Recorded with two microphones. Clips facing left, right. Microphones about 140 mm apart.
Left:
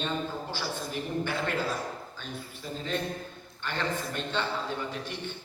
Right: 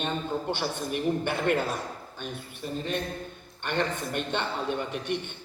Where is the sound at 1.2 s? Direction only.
60° right (ahead or behind).